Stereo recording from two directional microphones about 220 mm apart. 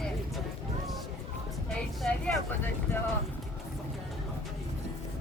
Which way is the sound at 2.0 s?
5° left (ahead or behind).